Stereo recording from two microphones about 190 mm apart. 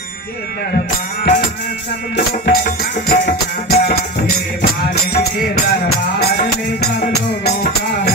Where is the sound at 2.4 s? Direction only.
50° left (ahead or behind).